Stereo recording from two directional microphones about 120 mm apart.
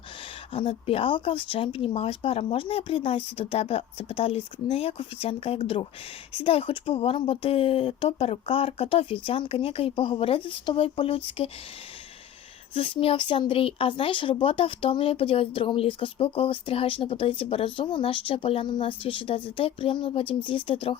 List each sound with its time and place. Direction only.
0.5 s speech: 50° left (ahead or behind)
12.7 s speech: 50° left (ahead or behind)